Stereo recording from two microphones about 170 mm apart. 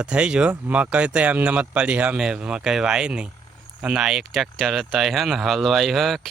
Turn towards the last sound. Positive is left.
turn(degrees=0)  # may be behind; listen again after turning